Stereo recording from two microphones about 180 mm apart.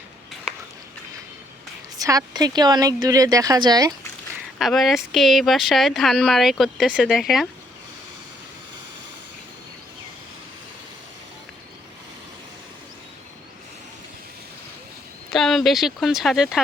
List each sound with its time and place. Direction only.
2.0 s speech: 20° right (ahead or behind)
4.5 s speech: centre (ahead or behind)
15.3 s speech: centre (ahead or behind)